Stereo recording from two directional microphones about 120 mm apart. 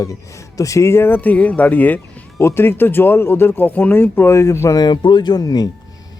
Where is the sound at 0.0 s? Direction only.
30° left (ahead or behind).